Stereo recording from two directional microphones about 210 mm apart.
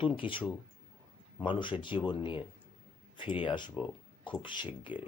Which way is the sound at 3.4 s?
20° left (ahead or behind).